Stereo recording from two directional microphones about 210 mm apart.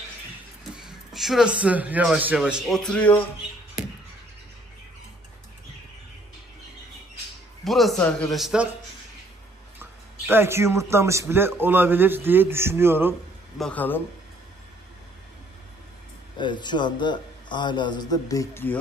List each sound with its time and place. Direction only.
0.7 s a sound: centre (ahead or behind)
1.6 s speech: 5° right (ahead or behind)
7.6 s speech: centre (ahead or behind)
10.2 s a man's voice: 10° right (ahead or behind)
13.6 s speech: 5° left (ahead or behind)
16.3 s a man's voice: 20° left (ahead or behind)